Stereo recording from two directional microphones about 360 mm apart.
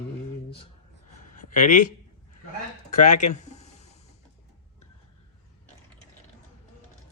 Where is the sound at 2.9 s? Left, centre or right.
Centre.